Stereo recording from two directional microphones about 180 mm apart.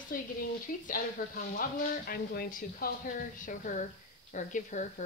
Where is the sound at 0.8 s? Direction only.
55° left (ahead or behind).